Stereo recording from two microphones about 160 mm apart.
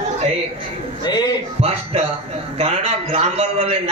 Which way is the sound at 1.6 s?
40° right (ahead or behind).